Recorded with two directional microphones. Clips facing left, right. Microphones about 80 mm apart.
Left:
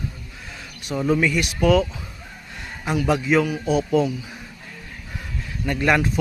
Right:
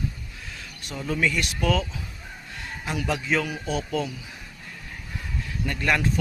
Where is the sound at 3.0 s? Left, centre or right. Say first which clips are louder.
Left 7 dB; centre.